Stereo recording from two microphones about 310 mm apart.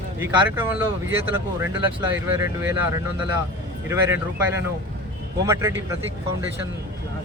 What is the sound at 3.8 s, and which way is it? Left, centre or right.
Speech, centre.